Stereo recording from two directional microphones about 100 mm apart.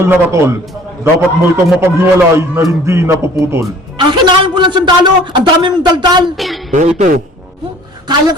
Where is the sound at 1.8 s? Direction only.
25° right (ahead or behind).